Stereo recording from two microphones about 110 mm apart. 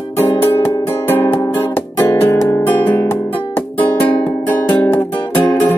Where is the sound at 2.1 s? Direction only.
20° left (ahead or behind).